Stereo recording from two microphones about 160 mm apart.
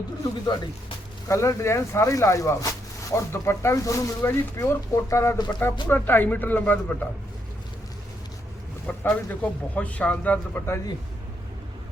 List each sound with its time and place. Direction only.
0.2 s speech: 25° left (ahead or behind)
8.9 s speech: 10° left (ahead or behind)